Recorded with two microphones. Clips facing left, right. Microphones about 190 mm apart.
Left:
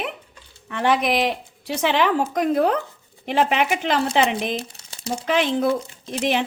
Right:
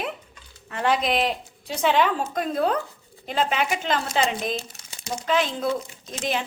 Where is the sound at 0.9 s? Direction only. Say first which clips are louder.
Left 3 dB; 75° left (ahead or behind).